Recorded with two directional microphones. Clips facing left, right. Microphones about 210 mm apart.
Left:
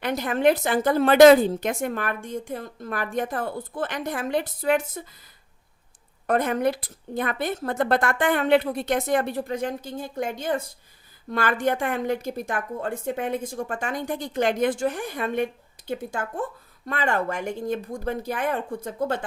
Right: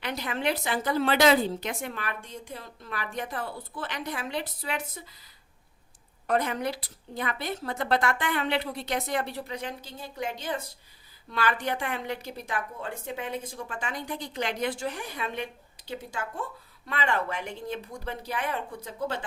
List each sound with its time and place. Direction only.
0.0 s a woman's voice: 50° left (ahead or behind)
6.2 s a woman's voice: 50° left (ahead or behind)